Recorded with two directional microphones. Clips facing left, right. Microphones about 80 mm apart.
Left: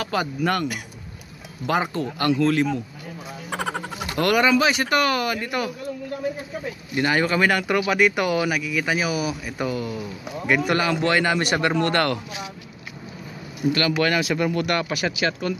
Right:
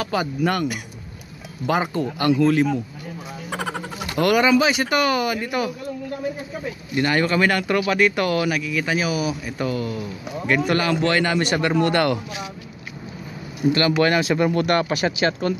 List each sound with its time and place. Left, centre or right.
0.0 s speech: centre
3.4 s a sound: centre
4.1 s speech: centre
7.0 s speech: centre
13.7 s speech: right